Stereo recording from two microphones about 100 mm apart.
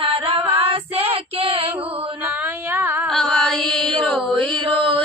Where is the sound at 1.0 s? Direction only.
70° right (ahead or behind).